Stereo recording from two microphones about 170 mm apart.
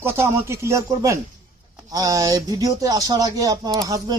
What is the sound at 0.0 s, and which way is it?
Speech, 15° right (ahead or behind).